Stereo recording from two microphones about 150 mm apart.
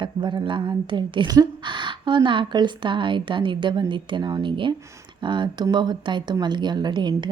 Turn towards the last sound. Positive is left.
turn(degrees=-30)  # may be behind; listen again after turning